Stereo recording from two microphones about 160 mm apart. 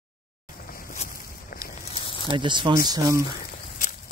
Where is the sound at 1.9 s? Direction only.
35° left (ahead or behind).